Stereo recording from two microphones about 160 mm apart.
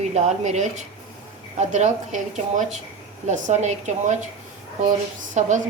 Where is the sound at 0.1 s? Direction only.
45° right (ahead or behind).